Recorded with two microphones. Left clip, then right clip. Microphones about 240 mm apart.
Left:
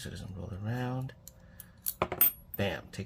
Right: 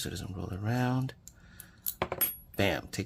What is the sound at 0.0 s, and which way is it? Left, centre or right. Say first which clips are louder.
Speech: right 5 dB; right.